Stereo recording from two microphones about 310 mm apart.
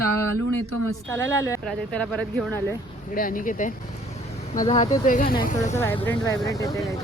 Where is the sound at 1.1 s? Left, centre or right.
Centre.